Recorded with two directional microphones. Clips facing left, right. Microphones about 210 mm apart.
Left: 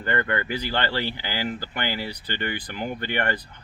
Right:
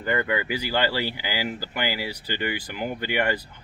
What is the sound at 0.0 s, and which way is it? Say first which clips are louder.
Speech: right 1 dB; 5° right (ahead or behind).